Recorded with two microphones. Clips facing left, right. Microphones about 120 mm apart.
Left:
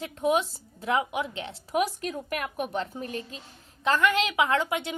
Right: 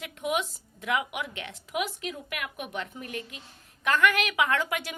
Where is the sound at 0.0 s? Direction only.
35° left (ahead or behind).